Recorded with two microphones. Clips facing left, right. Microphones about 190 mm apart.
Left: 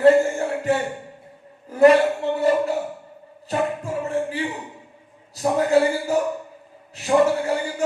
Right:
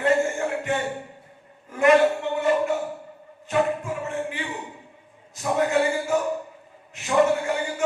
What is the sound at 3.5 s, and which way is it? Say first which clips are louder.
Speech: right 1 dB; 35° left (ahead or behind).